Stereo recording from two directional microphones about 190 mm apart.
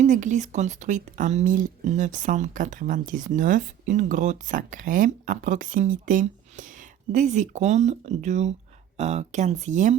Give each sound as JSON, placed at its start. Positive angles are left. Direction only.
{"t": 0.0, "sound": "speech", "side_deg": -40}